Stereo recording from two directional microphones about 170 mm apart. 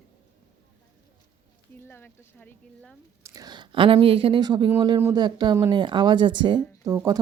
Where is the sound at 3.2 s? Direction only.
20° right (ahead or behind).